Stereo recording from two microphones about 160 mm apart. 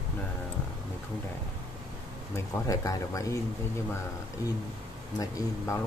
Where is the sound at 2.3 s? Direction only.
20° left (ahead or behind).